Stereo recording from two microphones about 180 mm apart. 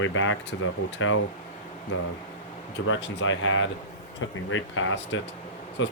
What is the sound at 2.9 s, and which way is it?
Speech, 85° left.